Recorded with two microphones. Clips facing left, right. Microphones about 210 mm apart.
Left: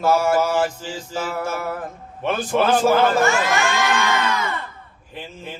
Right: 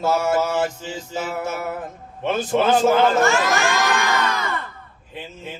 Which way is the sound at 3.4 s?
40° right (ahead or behind).